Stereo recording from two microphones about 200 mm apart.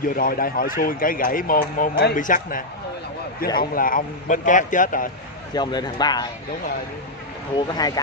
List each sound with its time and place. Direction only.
0.1 s speech: 45° left (ahead or behind)
5.5 s a man's voice: 20° left (ahead or behind)
7.5 s a man's voice: 20° left (ahead or behind)